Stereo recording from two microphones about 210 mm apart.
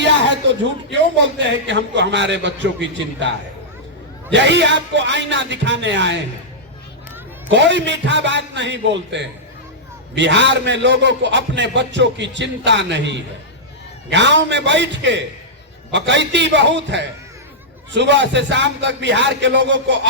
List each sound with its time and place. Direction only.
0.9 s a man's voice: 55° right (ahead or behind)
4.3 s a man's voice: 55° right (ahead or behind)
7.5 s a man's voice: 55° right (ahead or behind)